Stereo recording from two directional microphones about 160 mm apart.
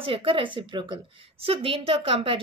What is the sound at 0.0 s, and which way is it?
A woman's voice, 35° right (ahead or behind).